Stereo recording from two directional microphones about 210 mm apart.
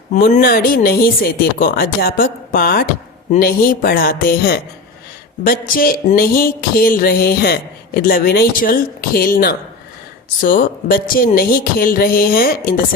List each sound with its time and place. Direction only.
0.1 s speech: 35° left (ahead or behind)